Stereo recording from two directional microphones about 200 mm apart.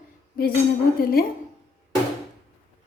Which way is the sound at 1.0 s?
50° left (ahead or behind).